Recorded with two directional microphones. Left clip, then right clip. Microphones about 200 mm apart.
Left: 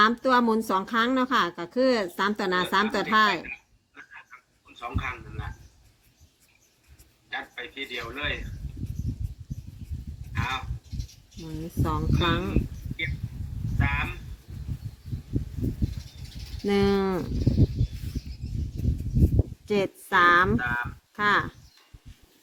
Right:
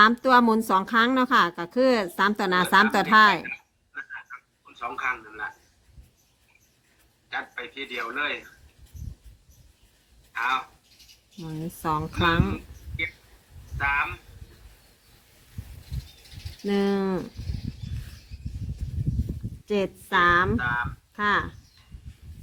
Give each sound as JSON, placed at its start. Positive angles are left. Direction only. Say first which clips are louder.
{"t": 0.0, "sound": "speech", "louder": "right 3 dB", "side_deg": -20}
{"t": 7.3, "sound": "a man's voice", "louder": "right 2 dB", "side_deg": -25}
{"t": 10.3, "sound": "speech", "louder": "right 5 dB", "side_deg": -20}
{"t": 13.7, "sound": "speech", "louder": "right 5 dB", "side_deg": -20}
{"t": 16.6, "sound": "cricket", "louder": "left 2 dB", "side_deg": 5}
{"t": 19.6, "sound": "a woman's voice", "louder": "even", "side_deg": 5}
{"t": 20.6, "sound": "speech", "louder": "right 2 dB", "side_deg": -20}
{"t": 21.2, "sound": "cricket", "louder": "left 1 dB", "side_deg": 0}